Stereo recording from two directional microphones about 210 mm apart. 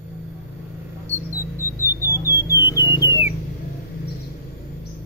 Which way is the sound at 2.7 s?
20° left (ahead or behind).